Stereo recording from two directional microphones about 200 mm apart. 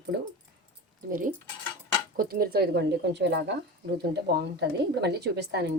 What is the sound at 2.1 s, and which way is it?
Speech, 45° right (ahead or behind).